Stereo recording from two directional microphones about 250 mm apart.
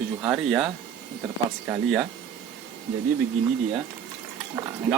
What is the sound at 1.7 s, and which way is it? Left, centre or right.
Speech, centre.